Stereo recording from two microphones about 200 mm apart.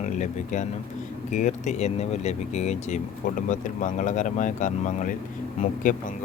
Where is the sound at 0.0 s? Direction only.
35° left (ahead or behind).